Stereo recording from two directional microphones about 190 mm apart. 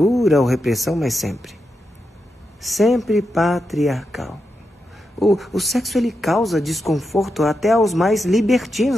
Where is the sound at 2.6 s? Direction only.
Centre (ahead or behind).